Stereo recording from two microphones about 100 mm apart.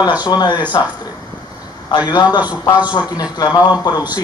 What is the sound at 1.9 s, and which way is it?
A man's voice, 45° left (ahead or behind).